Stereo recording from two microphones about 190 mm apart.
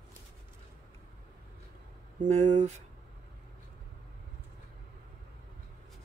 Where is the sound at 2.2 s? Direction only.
35° right (ahead or behind).